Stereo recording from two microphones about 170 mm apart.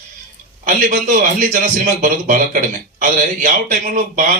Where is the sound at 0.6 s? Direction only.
50° right (ahead or behind).